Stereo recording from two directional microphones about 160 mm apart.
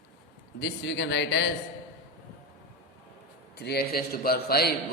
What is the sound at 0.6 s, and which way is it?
Speech, 90° left.